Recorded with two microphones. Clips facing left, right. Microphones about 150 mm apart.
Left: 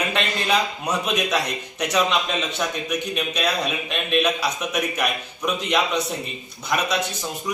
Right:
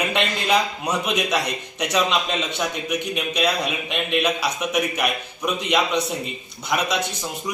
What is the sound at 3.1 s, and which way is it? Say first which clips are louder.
A man's voice: right 2 dB; 15° right (ahead or behind).